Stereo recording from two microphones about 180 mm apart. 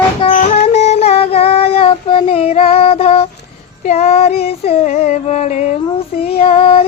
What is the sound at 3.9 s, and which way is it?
Female singing, 35° left (ahead or behind).